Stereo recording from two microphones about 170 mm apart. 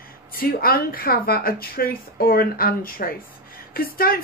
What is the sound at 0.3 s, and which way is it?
A woman's voice, 60° left (ahead or behind).